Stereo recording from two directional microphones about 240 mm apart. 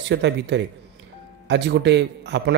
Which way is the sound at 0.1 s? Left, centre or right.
Right.